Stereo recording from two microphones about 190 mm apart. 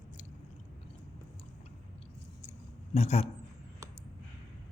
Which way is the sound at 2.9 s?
35° left (ahead or behind).